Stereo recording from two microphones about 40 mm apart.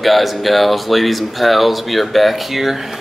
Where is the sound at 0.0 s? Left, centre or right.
Centre.